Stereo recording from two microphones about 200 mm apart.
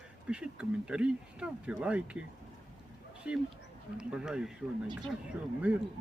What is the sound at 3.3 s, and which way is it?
Speech, 5° right (ahead or behind).